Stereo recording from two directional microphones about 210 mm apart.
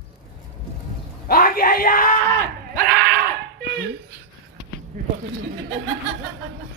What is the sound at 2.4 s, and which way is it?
Crowd, 45° right (ahead or behind).